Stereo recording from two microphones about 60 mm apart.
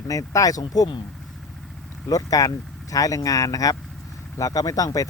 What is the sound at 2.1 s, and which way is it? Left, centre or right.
Speech, left.